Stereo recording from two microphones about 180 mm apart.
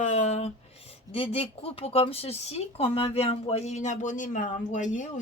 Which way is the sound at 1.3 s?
35° left (ahead or behind).